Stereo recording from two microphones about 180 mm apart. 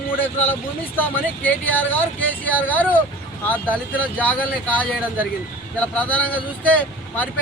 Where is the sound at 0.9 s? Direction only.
10° left (ahead or behind).